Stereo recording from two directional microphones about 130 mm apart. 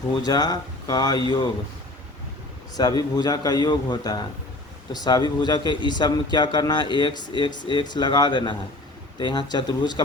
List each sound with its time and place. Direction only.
0.1 s speech: 30° left (ahead or behind)
2.7 s speech: 30° left (ahead or behind)